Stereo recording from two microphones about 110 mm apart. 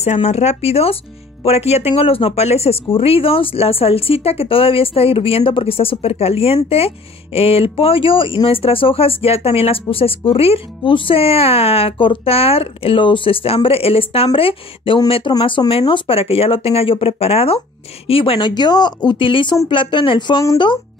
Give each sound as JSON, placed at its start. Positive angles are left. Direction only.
{"t": 0.0, "sound": "speech", "side_deg": 85}
{"t": 2.0, "sound": "speech", "side_deg": 60}
{"t": 15.3, "sound": "speech", "side_deg": 45}
{"t": 18.5, "sound": "speech", "side_deg": 40}